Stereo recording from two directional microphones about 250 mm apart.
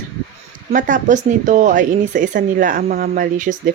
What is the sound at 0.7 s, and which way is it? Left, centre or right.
Speech, right.